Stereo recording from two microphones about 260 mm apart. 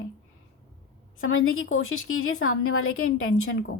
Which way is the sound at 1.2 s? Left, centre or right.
Left.